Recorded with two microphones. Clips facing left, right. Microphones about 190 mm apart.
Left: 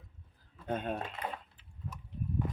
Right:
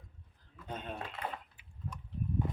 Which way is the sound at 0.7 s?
55° left (ahead or behind).